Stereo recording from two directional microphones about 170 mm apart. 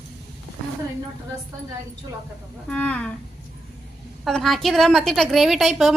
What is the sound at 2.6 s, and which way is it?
Speech, 5° left (ahead or behind).